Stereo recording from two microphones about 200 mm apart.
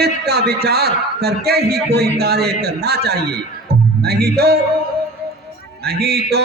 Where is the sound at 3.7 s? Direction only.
50° right (ahead or behind).